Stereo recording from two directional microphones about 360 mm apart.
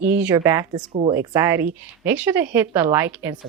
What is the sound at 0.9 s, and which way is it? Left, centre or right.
Speech, centre.